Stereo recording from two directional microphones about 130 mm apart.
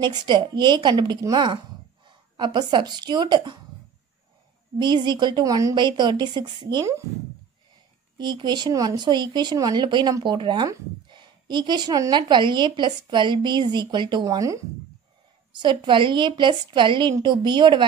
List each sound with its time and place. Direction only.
0.0 s a woman's voice: 35° right (ahead or behind)
4.7 s a woman's voice: 35° right (ahead or behind)
5.8 s a woman's voice: 35° right (ahead or behind)
8.2 s a woman's voice: 35° right (ahead or behind)
14.2 s speech: 25° right (ahead or behind)
15.6 s a woman's voice: 35° right (ahead or behind)